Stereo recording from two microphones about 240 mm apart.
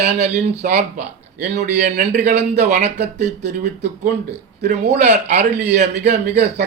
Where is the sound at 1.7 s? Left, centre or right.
Right.